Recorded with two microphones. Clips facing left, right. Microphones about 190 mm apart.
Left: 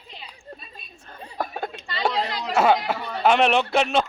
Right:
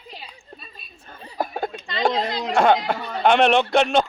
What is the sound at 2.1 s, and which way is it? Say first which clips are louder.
Speech: right 3 dB; 25° right (ahead or behind).